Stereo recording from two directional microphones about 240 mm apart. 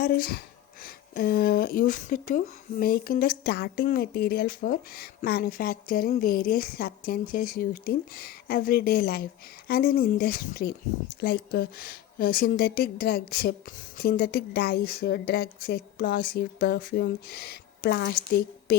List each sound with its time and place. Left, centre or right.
0.0 s speech: left